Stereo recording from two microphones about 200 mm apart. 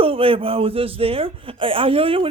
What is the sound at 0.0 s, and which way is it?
A man's voice, 30° right (ahead or behind).